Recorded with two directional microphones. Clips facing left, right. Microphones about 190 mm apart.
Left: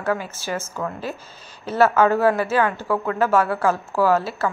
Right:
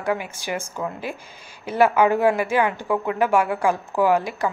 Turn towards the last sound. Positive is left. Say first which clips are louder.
# even
turn(degrees=-15)  # may be behind; listen again after turning